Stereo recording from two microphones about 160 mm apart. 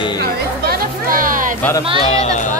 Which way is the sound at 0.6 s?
65° right (ahead or behind).